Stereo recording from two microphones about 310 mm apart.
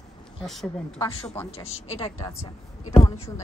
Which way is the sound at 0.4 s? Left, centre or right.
Centre.